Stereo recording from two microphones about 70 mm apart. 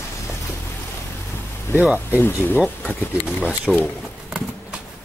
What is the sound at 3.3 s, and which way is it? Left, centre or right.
Speech, centre.